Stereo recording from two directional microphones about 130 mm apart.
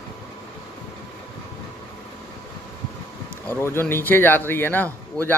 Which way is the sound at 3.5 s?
15° left (ahead or behind).